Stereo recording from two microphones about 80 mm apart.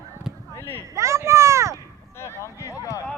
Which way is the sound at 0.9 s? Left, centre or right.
Right.